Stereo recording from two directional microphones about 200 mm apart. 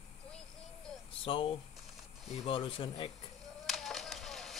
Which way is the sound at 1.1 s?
25° left (ahead or behind).